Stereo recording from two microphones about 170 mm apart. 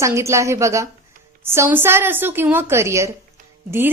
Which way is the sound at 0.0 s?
15° right (ahead or behind).